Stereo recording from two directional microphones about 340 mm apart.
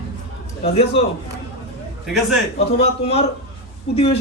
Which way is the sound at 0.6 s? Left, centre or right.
Centre.